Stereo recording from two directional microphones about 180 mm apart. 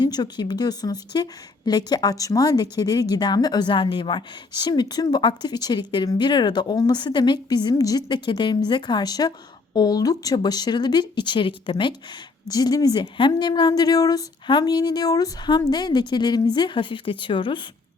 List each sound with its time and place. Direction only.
0.0 s a woman's voice: 25° left (ahead or behind)